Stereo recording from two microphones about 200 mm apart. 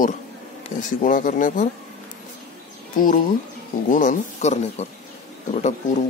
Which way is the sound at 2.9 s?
40° left (ahead or behind).